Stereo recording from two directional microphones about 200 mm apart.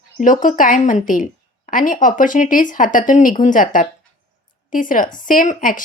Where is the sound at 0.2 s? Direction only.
40° left (ahead or behind).